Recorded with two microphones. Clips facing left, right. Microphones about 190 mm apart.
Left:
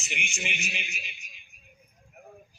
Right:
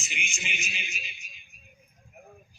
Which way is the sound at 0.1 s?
65° left (ahead or behind).